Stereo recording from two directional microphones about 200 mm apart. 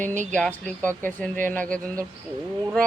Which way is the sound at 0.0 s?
40° right (ahead or behind).